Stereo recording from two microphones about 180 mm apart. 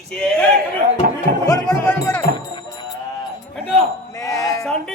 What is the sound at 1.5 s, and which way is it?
Speech, 15° left (ahead or behind).